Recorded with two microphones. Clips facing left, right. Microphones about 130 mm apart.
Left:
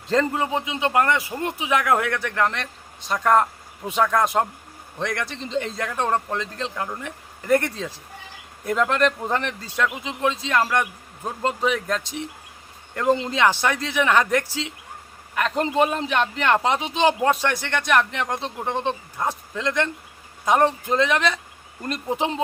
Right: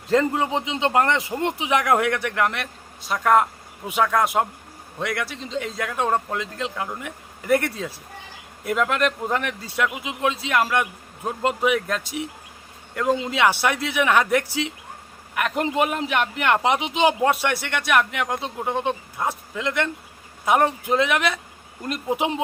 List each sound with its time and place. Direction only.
0.1 s a man's voice: 15° right (ahead or behind)